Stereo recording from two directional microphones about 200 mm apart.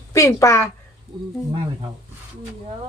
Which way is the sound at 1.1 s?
20° right (ahead or behind).